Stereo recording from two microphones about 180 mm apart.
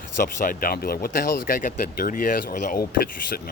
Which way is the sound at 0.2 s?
50° left (ahead or behind).